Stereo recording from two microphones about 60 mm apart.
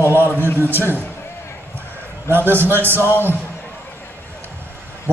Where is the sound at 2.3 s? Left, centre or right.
Right.